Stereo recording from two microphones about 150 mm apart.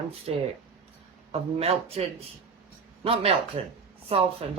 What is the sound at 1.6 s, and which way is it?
Speech, 40° right (ahead or behind).